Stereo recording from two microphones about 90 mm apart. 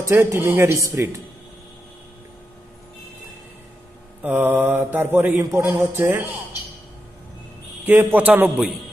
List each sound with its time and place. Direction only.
0.0 s mantra: 30° right (ahead or behind)
4.2 s mantra: 20° right (ahead or behind)
7.8 s mantra: 20° right (ahead or behind)